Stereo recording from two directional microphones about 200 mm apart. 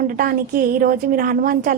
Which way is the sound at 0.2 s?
45° right (ahead or behind).